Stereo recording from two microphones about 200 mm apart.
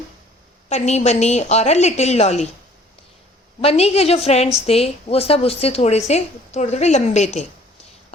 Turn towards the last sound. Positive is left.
turn(degrees=35)  # may be behind; listen again after turning